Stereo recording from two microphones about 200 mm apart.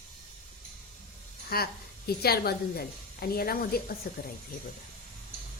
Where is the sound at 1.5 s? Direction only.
50° left (ahead or behind).